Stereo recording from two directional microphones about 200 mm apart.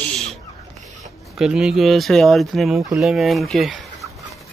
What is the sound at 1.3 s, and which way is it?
Speech, 5° right (ahead or behind).